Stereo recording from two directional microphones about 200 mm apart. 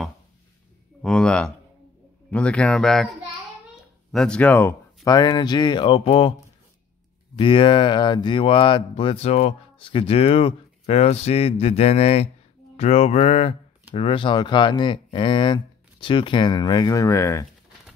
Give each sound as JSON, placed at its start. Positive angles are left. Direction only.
{"t": 1.0, "sound": "speech", "side_deg": 5}
{"t": 7.3, "sound": "speech", "side_deg": 25}